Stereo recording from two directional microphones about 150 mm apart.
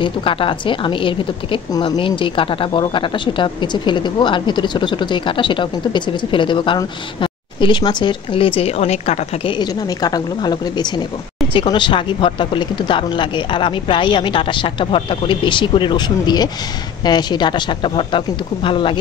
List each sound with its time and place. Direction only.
0.0 s a woman's voice: 35° left (ahead or behind)
9.6 s a woman's voice: 30° left (ahead or behind)